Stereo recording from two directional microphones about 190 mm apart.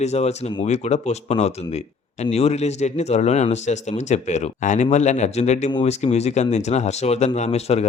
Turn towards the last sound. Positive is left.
turn(degrees=35)  # may be behind; listen again after turning